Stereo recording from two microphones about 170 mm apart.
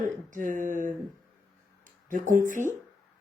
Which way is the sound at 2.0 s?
50° right (ahead or behind).